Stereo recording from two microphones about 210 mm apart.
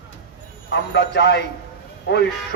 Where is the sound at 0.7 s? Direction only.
55° left (ahead or behind).